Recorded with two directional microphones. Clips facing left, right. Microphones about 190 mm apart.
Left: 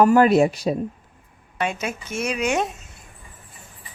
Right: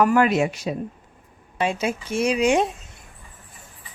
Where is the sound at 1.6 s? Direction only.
30° right (ahead or behind).